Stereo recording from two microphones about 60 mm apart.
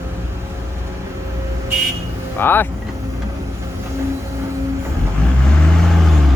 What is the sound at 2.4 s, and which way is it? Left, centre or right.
Speech, left.